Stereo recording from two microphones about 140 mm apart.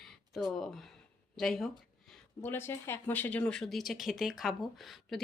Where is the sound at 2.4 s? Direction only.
15° left (ahead or behind).